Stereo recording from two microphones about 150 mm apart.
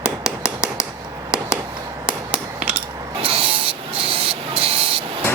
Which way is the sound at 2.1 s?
5° right (ahead or behind).